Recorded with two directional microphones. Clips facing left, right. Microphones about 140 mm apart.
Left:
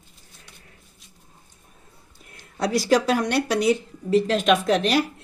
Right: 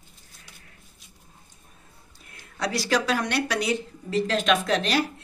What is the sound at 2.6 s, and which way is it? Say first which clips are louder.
Speech: left 5 dB; 45° left (ahead or behind).